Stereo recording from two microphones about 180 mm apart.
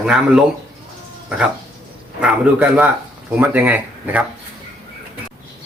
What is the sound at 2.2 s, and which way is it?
Speech, 10° right (ahead or behind).